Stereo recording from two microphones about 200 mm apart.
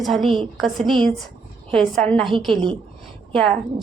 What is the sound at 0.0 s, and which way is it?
A woman's voice, centre (ahead or behind).